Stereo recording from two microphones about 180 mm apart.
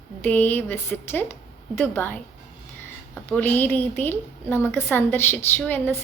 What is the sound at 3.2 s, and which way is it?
A woman's voice, 10° left (ahead or behind).